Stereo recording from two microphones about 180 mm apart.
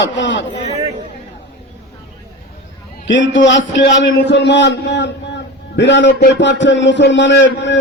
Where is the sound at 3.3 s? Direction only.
85° left.